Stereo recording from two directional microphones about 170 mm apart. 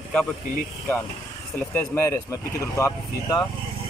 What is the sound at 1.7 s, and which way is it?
Speech, 15° left (ahead or behind).